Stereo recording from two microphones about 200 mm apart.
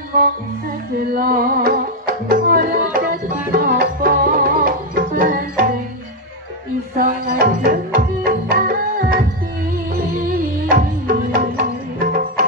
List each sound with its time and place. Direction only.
1.1 s music: 45° right (ahead or behind)
7.0 s music: 45° right (ahead or behind)
10.7 s music: 45° right (ahead or behind)